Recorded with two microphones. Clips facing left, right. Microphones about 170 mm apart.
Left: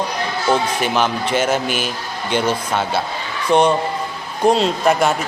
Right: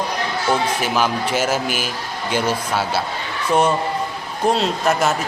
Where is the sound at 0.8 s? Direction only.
5° right (ahead or behind).